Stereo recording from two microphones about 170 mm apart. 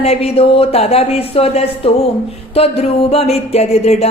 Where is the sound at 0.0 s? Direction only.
35° left (ahead or behind).